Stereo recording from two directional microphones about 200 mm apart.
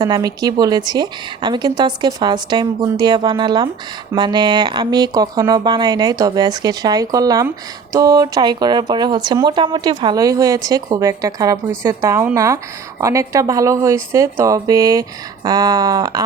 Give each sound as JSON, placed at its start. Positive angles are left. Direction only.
{"t": 0.0, "sound": "a woman's voice", "side_deg": -20}